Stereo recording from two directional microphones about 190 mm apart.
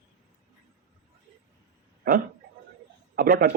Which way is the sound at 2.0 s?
50° right (ahead or behind).